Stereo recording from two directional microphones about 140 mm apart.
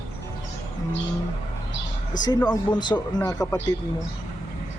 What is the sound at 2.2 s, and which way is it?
Speech, 30° left (ahead or behind).